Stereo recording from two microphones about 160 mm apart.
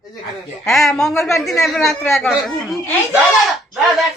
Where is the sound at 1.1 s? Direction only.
20° left (ahead or behind).